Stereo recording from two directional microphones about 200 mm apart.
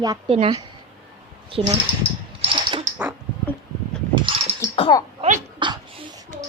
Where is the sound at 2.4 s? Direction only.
30° right (ahead or behind).